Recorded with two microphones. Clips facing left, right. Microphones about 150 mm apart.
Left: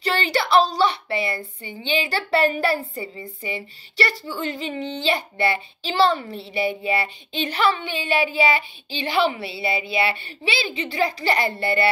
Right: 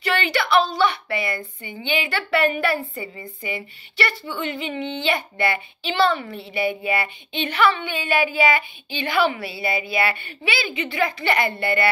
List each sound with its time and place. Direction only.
0.0 s a woman's voice: 35° left (ahead or behind)